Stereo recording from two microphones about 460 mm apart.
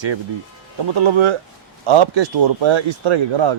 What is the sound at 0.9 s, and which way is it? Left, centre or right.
Speech, right.